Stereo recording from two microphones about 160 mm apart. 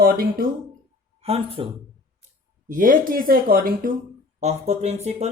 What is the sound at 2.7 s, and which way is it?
Speech, 60° right (ahead or behind).